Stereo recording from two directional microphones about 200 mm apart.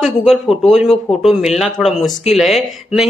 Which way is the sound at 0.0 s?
Centre (ahead or behind).